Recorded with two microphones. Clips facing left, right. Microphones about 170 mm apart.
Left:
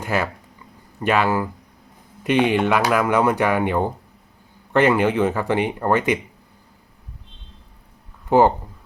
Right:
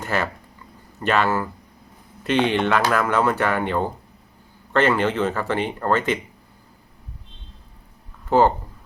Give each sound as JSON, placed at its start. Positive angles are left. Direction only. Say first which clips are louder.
{"t": 0.0, "sound": "speech", "louder": "left 2 dB", "side_deg": 10}
{"t": 8.3, "sound": "speech", "louder": "left 2 dB", "side_deg": 15}